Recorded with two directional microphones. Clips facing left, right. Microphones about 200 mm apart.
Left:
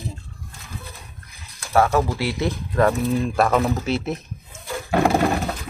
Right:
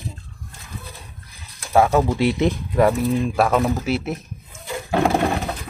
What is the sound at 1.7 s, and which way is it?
Speech, 20° right (ahead or behind).